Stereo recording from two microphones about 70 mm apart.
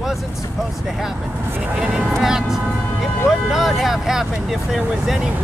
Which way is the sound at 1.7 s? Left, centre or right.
Centre.